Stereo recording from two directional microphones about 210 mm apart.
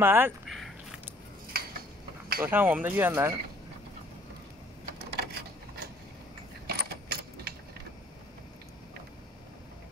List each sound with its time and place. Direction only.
0.0 s speech: 10° right (ahead or behind)
1.5 s cutlery: 45° right (ahead or behind)
2.4 s speech: 10° right (ahead or behind)
4.9 s a sound: 50° right (ahead or behind)
6.7 s keys jangling: 50° right (ahead or behind)